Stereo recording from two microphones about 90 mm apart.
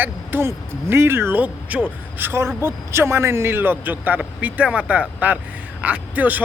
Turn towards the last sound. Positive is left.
turn(degrees=-20)  # may be behind; listen again after turning